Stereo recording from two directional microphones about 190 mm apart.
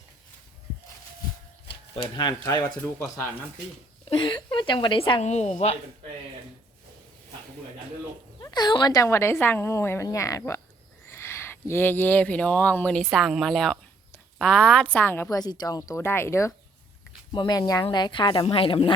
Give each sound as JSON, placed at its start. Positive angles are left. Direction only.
{"t": 1.6, "sound": "speech", "side_deg": 25}
{"t": 8.4, "sound": "speech", "side_deg": 20}